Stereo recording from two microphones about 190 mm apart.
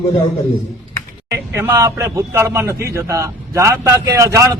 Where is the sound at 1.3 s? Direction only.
15° right (ahead or behind).